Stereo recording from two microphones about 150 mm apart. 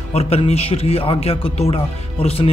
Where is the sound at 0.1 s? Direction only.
40° left (ahead or behind).